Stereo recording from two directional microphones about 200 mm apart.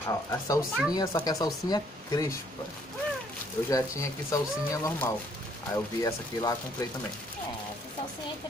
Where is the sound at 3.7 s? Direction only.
15° left (ahead or behind).